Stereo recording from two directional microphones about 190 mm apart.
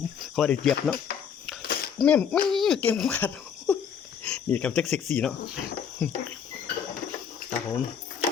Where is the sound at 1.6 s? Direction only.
55° left (ahead or behind).